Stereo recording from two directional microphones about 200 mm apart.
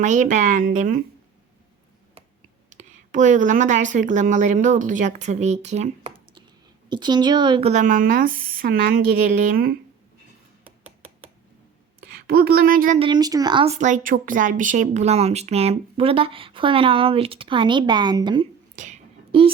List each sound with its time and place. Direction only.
0.0 s a woman's voice: 40° right (ahead or behind)
2.6 s speech: 40° right (ahead or behind); by 7.7 s 25° right (ahead or behind)
7.7 s a woman's voice: 40° right (ahead or behind)
10.6 s a sound: 30° right (ahead or behind)
12.0 s a woman's voice: 50° right (ahead or behind)
13.0 s speech: 20° right (ahead or behind)
13.7 s speech: 40° right (ahead or behind); by 18.4 s 20° right (ahead or behind)
18.8 s a sound: 35° right (ahead or behind)